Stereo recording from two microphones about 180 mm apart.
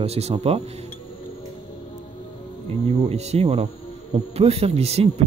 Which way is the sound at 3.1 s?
35° right (ahead or behind).